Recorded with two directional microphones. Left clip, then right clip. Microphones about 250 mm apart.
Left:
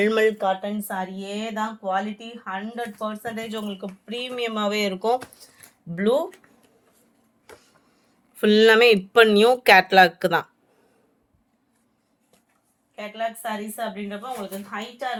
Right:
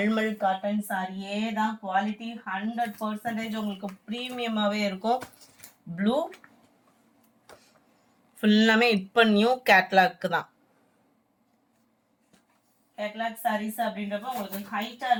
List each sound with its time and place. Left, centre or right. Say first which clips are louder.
0.0 s speech: left 7 dB; left
8.4 s speech: left 7 dB; left
13.1 s speech: left 1 dB; left